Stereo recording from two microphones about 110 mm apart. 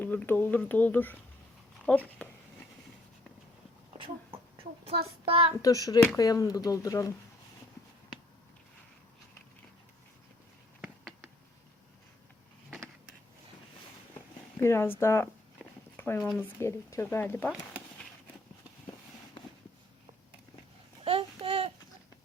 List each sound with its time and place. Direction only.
0.0 s speech: 15° left (ahead or behind)
3.9 s a sound: 60° right (ahead or behind)
5.6 s speech: 35° left (ahead or behind)
14.5 s speech: 25° left (ahead or behind)
16.0 s a sound: 20° left (ahead or behind)
16.4 s speech: 25° left (ahead or behind)
21.0 s babbling: 60° right (ahead or behind)